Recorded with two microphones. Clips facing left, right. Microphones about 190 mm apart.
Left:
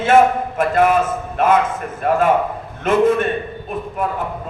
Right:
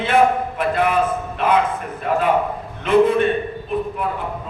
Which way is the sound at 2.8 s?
45° left (ahead or behind).